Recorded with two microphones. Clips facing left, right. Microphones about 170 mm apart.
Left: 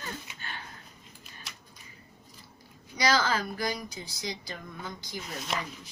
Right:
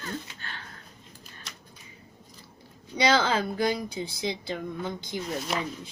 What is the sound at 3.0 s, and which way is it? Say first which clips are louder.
Speech: right 3 dB; 25° right (ahead or behind).